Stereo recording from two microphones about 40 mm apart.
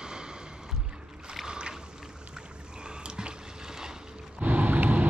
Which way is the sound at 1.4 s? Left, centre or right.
Right.